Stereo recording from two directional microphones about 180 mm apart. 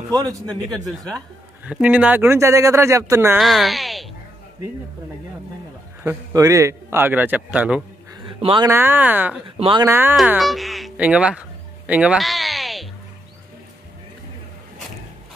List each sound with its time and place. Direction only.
0.1 s a man's voice: 20° right (ahead or behind)
1.7 s a man's voice: 5° right (ahead or behind)
3.3 s a woman's voice: centre (ahead or behind)
6.0 s a man's voice: 20° right (ahead or behind)
8.3 s speech: 30° right (ahead or behind)
8.6 s a man's voice: 10° right (ahead or behind)
9.6 s a man's voice: 30° right (ahead or behind)
9.8 s a man's voice: 10° right (ahead or behind)
10.1 s speech: centre (ahead or behind)